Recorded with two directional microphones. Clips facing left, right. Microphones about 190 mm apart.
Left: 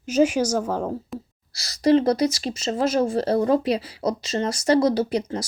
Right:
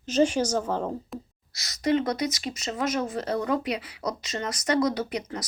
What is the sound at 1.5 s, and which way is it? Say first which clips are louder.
Speech: left 6 dB; 35° left (ahead or behind).